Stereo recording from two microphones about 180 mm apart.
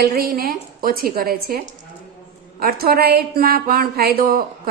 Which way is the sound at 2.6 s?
55° right (ahead or behind).